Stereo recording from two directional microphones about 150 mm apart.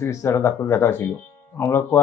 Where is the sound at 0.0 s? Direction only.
20° left (ahead or behind).